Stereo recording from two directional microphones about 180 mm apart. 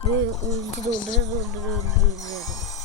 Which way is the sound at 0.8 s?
45° left (ahead or behind).